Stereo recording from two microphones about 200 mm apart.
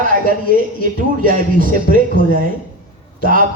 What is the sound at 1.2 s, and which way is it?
A man's voice, 45° right (ahead or behind).